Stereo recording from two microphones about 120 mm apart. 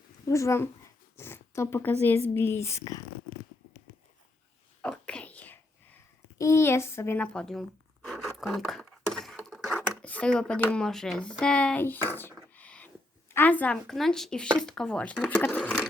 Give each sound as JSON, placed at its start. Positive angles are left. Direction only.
{"t": 0.3, "sound": "speech", "side_deg": 25}
{"t": 4.8, "sound": "whispering", "side_deg": 10}
{"t": 6.4, "sound": "speech", "side_deg": 25}
{"t": 7.2, "sound": "speech", "side_deg": 5}
{"t": 8.0, "sound": "a sound", "side_deg": 0}
{"t": 13.3, "sound": "speech", "side_deg": 15}
{"t": 15.5, "sound": "a sound", "side_deg": 10}